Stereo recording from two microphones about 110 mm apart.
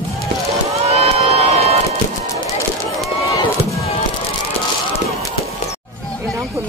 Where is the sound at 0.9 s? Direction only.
65° right (ahead or behind).